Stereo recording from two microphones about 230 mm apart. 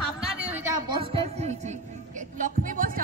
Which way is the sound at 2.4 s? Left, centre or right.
Right.